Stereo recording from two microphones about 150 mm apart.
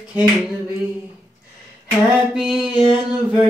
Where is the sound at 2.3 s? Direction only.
5° right (ahead or behind).